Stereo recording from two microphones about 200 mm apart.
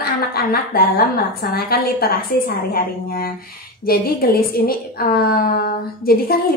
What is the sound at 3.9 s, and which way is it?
A woman's voice, 50° left (ahead or behind).